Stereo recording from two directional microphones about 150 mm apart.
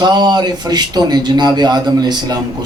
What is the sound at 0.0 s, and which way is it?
Speech, 30° right (ahead or behind).